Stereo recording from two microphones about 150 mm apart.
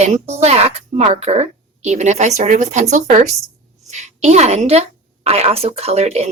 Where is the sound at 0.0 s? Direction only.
45° right (ahead or behind).